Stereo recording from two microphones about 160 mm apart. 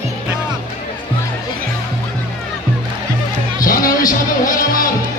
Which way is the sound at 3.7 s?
60° left (ahead or behind).